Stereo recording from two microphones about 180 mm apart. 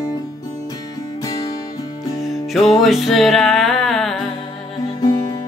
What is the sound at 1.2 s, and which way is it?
Music, 20° left (ahead or behind).